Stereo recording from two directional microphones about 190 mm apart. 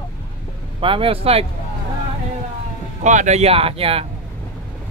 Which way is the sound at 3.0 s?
40° right (ahead or behind).